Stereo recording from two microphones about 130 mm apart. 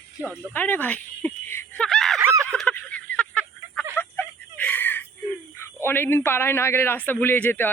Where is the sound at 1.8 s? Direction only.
Centre (ahead or behind).